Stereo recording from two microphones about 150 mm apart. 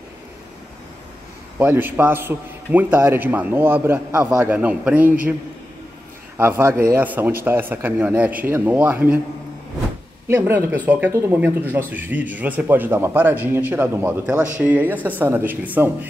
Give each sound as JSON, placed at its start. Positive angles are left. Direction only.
{"t": 1.6, "sound": "a man's voice", "side_deg": -15}
{"t": 6.3, "sound": "a man's voice", "side_deg": -15}
{"t": 10.2, "sound": "a man's voice", "side_deg": -15}